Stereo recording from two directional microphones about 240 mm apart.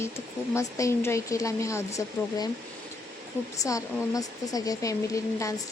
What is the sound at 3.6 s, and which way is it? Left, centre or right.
Speech, centre.